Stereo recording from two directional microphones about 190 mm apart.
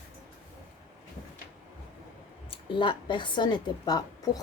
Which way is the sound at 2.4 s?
25° left (ahead or behind).